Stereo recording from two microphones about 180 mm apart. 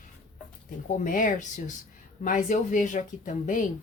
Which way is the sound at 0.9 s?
45° left (ahead or behind).